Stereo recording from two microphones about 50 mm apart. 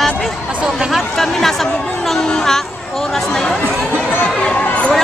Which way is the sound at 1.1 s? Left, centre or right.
Centre.